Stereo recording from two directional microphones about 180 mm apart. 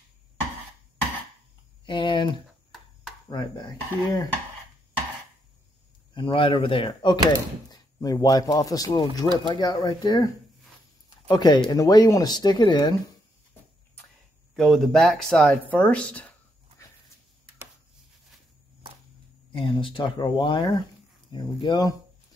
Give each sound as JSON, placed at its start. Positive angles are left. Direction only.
{"t": 1.9, "sound": "speech", "side_deg": 25}
{"t": 2.7, "sound": "a sound", "side_deg": 0}
{"t": 3.3, "sound": "speech", "side_deg": 25}
{"t": 6.1, "sound": "speech", "side_deg": 25}
{"t": 14.5, "sound": "speech", "side_deg": 0}
{"t": 19.5, "sound": "speech", "side_deg": 30}